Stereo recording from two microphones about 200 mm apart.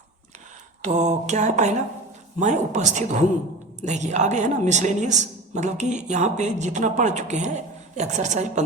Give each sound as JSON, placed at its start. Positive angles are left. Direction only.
{"t": 0.8, "sound": "a woman's voice", "side_deg": -35}